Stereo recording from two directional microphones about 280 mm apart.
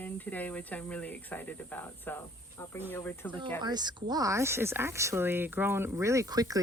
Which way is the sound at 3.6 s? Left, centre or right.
Centre.